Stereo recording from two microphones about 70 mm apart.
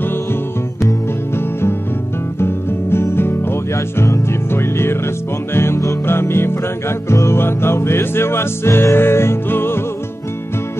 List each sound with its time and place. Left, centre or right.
2.4 s music: left